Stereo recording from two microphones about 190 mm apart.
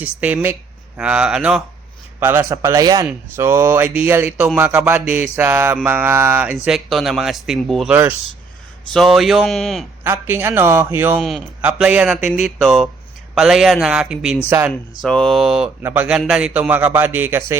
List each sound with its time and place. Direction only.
0.2 s mantra: 5° right (ahead or behind)
0.9 s speech: 5° right (ahead or behind)
2.1 s mantra: 10° right (ahead or behind)
6.7 s speech: centre (ahead or behind)
10.0 s mantra: 10° right (ahead or behind)
11.2 s speech: centre (ahead or behind)